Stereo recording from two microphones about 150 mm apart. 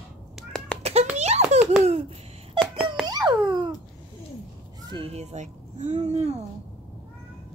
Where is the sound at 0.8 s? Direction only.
45° right (ahead or behind).